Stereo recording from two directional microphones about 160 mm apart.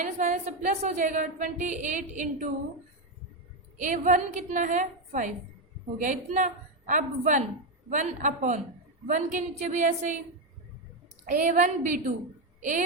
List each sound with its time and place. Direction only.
0.0 s a woman's voice: 50° right (ahead or behind)
3.8 s a woman's voice: 50° right (ahead or behind)
11.3 s a woman's voice: 55° right (ahead or behind)